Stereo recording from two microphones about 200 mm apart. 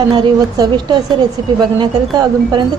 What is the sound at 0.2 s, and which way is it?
A woman's voice, 20° right (ahead or behind).